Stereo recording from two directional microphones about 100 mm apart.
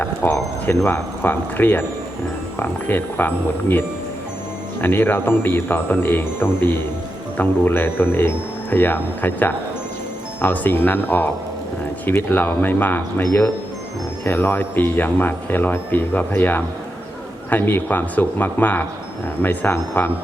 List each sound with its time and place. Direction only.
0.0 s a sound: 20° left (ahead or behind)
0.9 s speech: 20° left (ahead or behind)
14.3 s a man's voice: 20° left (ahead or behind)